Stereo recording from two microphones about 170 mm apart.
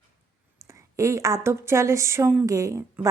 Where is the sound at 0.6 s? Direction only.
20° right (ahead or behind).